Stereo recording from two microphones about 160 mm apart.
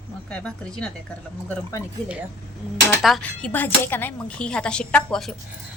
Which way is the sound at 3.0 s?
5° left (ahead or behind).